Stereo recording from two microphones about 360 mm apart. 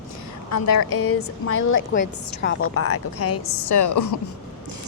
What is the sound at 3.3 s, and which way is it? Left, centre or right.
Speech, left.